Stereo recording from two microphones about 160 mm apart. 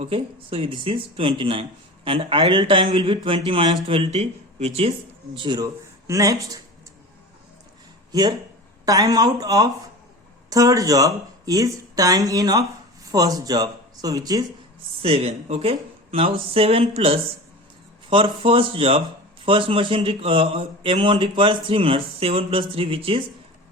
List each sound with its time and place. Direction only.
0.0 s speech: 35° right (ahead or behind)
8.9 s speech: 20° right (ahead or behind)
15.0 s speech: 40° right (ahead or behind)